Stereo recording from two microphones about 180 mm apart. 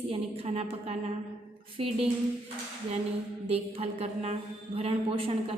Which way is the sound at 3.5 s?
35° right (ahead or behind).